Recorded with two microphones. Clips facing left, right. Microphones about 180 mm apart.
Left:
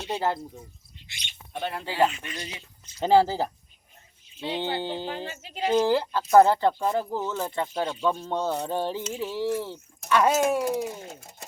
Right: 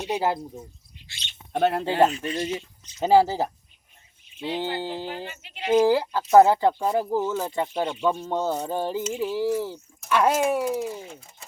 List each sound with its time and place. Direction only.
0.0 s speech: 15° right (ahead or behind)
1.0 s bird: 15° left (ahead or behind)
1.5 s speech: 60° right (ahead or behind)
2.0 s speech: 35° right (ahead or behind)
2.8 s speech: 10° right (ahead or behind)
10.8 s speech: 40° left (ahead or behind)